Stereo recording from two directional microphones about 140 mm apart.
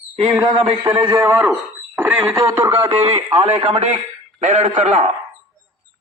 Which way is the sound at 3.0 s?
40° right (ahead or behind).